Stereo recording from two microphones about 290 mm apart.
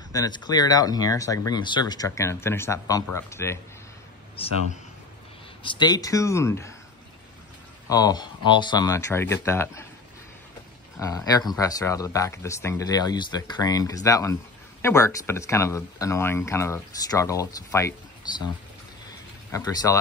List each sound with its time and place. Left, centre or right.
0.1 s speech: centre
4.4 s a man's voice: centre
5.6 s speech: centre
7.9 s speech: centre
11.0 s speech: centre
19.0 s a sound: centre